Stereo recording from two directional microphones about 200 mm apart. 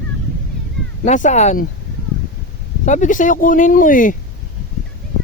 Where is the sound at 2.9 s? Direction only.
40° left (ahead or behind).